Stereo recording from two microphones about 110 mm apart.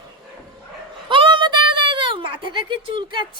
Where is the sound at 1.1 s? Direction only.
50° right (ahead or behind).